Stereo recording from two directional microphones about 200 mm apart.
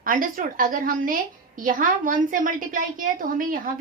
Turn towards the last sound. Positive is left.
turn(degrees=-45)  # may be behind; listen again after turning